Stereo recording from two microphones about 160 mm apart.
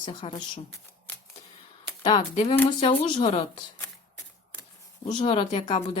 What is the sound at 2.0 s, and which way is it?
A woman's voice, 30° left (ahead or behind).